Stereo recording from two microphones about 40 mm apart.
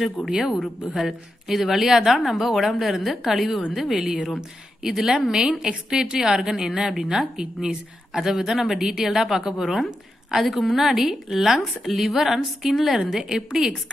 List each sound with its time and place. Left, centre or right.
0.3 s a woman's voice: centre
0.6 s a woman's voice: centre
3.9 s a woman's voice: centre
10.9 s a woman's voice: centre